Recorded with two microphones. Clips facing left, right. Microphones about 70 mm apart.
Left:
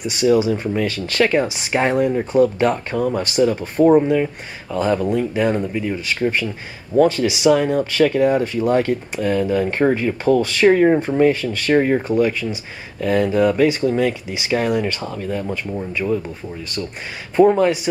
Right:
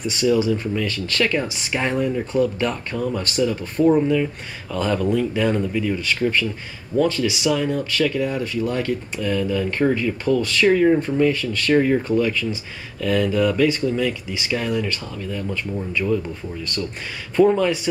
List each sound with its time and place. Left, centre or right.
0.0 s speech: centre
0.8 s speech: left
4.7 s speech: centre
17.4 s speech: centre